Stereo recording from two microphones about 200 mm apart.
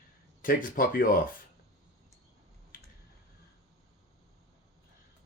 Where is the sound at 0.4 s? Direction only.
45° left (ahead or behind).